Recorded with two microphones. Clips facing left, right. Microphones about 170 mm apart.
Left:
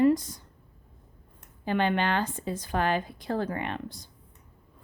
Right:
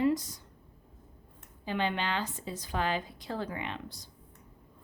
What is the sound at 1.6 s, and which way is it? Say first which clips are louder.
A woman's voice: left 6 dB; 55° left (ahead or behind).